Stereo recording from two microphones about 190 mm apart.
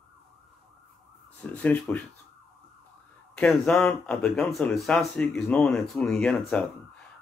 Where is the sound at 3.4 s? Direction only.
5° left (ahead or behind).